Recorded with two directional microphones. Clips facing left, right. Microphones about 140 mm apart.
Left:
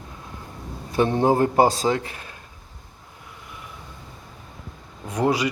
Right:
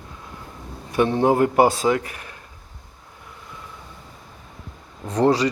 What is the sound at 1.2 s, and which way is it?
A man's voice, 30° left (ahead or behind).